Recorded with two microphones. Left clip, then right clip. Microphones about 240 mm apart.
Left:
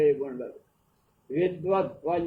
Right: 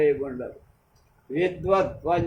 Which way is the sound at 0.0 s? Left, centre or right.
Right.